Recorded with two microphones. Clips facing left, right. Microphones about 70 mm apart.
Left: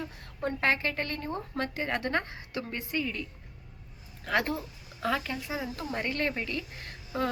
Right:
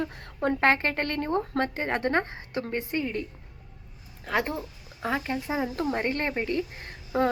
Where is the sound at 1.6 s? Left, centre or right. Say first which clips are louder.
Right 4 dB; right.